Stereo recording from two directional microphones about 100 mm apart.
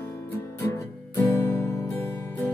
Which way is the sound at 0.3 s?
25° left (ahead or behind).